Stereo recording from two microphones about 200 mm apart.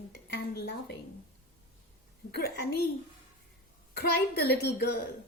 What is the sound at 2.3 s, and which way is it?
Speech, 55° left (ahead or behind).